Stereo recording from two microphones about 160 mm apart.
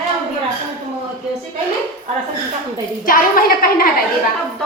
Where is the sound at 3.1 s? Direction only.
65° left (ahead or behind).